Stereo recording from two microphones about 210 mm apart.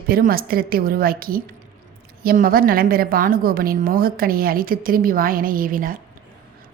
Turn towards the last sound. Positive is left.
turn(degrees=-40)  # may be behind; listen again after turning